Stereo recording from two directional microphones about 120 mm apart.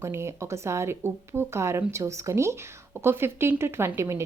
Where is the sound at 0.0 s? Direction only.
20° right (ahead or behind).